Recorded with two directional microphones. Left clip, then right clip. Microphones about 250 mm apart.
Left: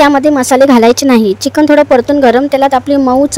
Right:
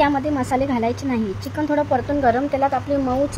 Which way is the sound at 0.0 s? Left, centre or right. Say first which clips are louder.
Left 12 dB; left.